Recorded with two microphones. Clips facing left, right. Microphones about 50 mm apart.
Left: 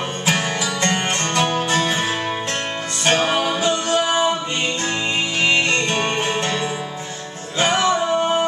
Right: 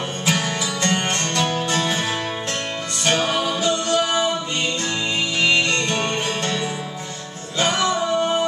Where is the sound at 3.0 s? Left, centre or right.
Left.